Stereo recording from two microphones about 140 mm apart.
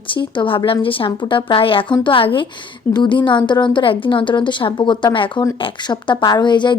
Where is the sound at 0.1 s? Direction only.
40° left (ahead or behind).